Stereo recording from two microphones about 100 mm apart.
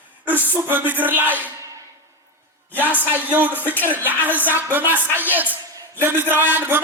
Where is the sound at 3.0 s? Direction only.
20° right (ahead or behind).